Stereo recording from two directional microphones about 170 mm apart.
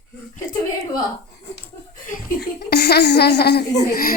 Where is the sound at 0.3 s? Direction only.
20° left (ahead or behind).